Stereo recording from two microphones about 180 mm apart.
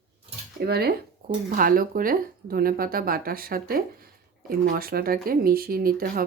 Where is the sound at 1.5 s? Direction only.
50° right (ahead or behind).